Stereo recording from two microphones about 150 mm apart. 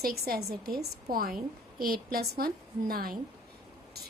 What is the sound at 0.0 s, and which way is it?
Speech, 90° right.